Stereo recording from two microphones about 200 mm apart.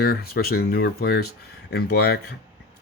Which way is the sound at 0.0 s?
50° left (ahead or behind).